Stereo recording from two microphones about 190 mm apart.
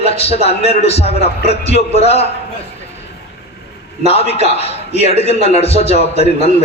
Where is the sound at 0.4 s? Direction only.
35° left (ahead or behind).